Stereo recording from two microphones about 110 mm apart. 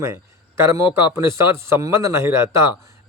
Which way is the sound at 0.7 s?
25° right (ahead or behind).